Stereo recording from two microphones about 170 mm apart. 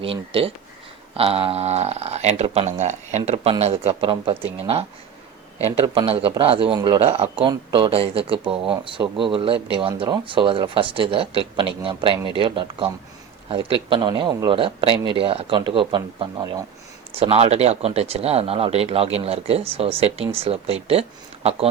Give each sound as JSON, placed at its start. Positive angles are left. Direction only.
{"t": 0.0, "sound": "speech", "side_deg": -35}
{"t": 17.2, "sound": "speech", "side_deg": -35}